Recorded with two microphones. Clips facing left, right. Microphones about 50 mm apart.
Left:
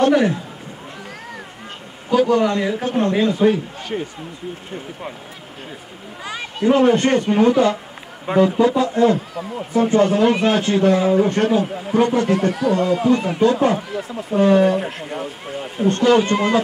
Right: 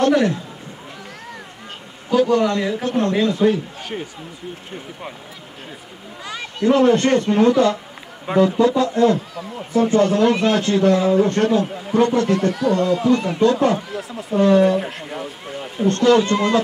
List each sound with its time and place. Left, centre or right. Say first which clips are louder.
0.0 s speech: left 1 dB; centre
2.1 s speech: even; centre
3.9 s speech: left 4 dB; centre
6.2 s speech: even; left
11.6 s speech: left 1 dB; centre
12.2 s speech: even; centre
13.7 s speech: left 2 dB; centre
14.4 s speech: even; centre
14.8 s speech: left 1 dB; centre
15.9 s speech: even; left